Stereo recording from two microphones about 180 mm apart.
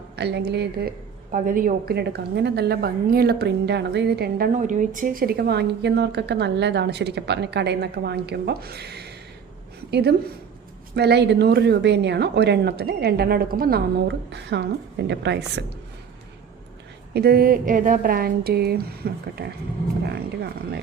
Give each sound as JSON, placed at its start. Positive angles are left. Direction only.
{"t": 0.2, "sound": "a woman's voice", "side_deg": -65}
{"t": 1.3, "sound": "a woman's voice", "side_deg": -50}
{"t": 14.3, "sound": "a woman's voice", "side_deg": -70}
{"t": 17.2, "sound": "a woman's voice", "side_deg": -60}